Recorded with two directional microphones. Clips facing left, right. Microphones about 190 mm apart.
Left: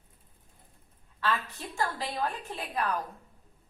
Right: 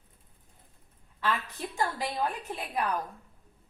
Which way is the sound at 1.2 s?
15° right (ahead or behind).